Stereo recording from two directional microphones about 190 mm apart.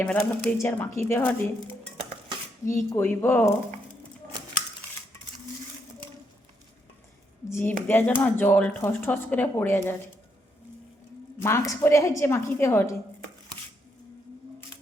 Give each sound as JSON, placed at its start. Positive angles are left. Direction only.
{"t": 0.0, "sound": "speech", "side_deg": 10}
{"t": 2.6, "sound": "speech", "side_deg": 10}
{"t": 7.5, "sound": "speech", "side_deg": 10}
{"t": 11.4, "sound": "speech", "side_deg": 15}